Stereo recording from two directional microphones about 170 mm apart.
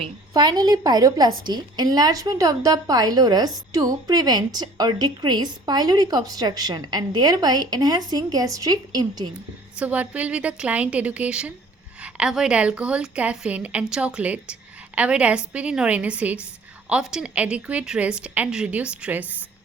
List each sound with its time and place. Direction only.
0.0 s a woman's voice: 25° right (ahead or behind)
9.7 s a woman's voice: 10° right (ahead or behind)